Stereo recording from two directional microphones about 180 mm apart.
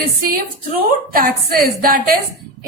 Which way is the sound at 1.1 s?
55° right (ahead or behind).